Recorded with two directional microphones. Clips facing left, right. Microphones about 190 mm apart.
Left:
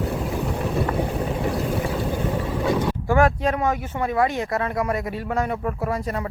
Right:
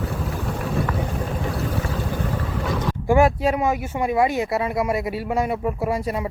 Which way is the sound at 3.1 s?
10° right (ahead or behind).